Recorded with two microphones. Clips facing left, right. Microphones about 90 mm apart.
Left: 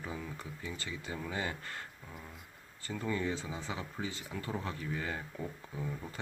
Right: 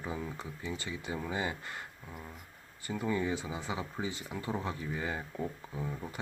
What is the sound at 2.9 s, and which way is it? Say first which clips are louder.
Speech: right 3 dB; 15° right (ahead or behind).